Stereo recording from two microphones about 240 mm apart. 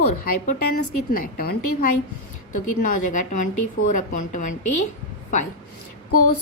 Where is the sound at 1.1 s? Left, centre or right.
Left.